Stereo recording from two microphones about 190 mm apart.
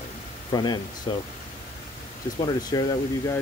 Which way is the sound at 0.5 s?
20° left (ahead or behind).